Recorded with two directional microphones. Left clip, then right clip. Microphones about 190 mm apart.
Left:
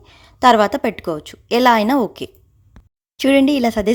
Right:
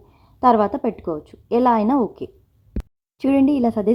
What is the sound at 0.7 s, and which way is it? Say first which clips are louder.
Speech: left 4 dB; 30° left (ahead or behind).